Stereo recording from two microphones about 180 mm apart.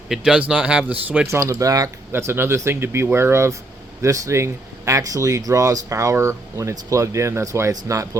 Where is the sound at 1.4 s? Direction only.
20° right (ahead or behind).